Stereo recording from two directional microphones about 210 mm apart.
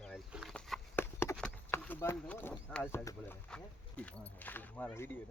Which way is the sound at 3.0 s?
5° left (ahead or behind).